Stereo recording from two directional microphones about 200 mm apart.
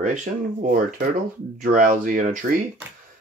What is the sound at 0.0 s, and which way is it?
Speech, 40° right (ahead or behind).